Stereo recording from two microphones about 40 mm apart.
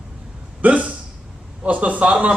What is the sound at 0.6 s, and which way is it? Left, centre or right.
Hiccup, right.